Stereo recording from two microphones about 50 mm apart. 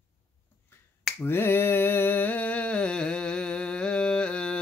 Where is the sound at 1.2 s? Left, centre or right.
Left.